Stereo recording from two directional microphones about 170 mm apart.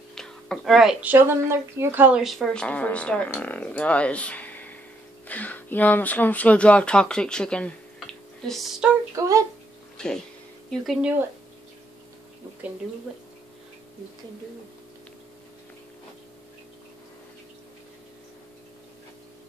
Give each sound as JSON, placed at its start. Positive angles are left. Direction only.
{"t": 0.1, "sound": "speech", "side_deg": 5}
{"t": 9.1, "sound": "a sound", "side_deg": -20}
{"t": 9.9, "sound": "speech", "side_deg": 5}
{"t": 13.1, "sound": "speech", "side_deg": -5}